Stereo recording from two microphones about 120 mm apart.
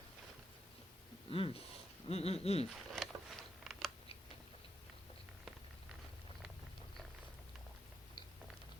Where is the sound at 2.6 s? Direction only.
Centre (ahead or behind).